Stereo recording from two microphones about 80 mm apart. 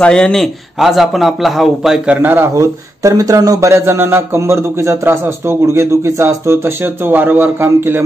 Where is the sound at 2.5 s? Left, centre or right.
Right.